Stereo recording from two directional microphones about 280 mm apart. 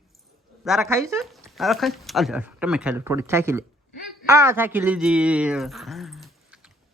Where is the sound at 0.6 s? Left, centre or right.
Centre.